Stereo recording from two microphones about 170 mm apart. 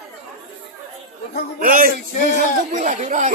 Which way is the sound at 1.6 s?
55° right (ahead or behind).